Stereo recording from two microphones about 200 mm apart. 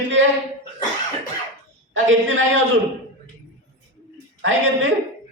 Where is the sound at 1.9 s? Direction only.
75° right (ahead or behind).